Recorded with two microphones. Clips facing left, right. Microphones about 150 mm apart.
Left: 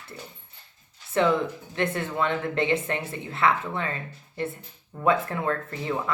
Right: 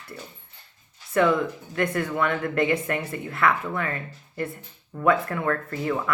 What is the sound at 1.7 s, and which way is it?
Speech, 25° left (ahead or behind).